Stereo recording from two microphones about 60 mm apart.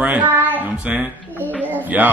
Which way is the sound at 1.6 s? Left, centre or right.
Right.